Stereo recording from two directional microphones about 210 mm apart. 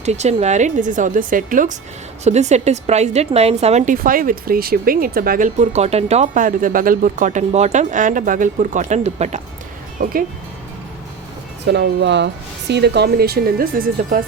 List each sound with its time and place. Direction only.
0.0 s a woman's voice: 30° right (ahead or behind)
10.0 s speech: 45° right (ahead or behind)
11.7 s speech: 55° right (ahead or behind)